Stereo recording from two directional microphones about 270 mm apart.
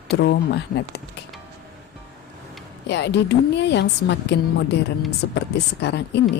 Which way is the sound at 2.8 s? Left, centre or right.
Left.